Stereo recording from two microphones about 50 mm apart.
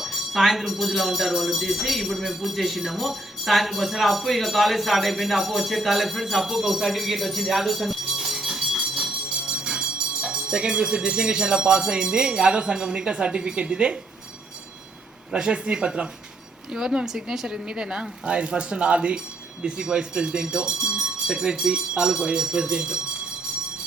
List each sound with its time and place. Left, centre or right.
0.0 s speech: centre
15.3 s speech: centre